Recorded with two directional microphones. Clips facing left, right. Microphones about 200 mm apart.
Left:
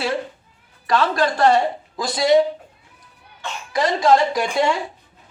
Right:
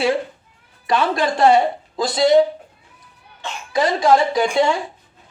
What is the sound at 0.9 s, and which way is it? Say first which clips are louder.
Speech: even; 20° right (ahead or behind).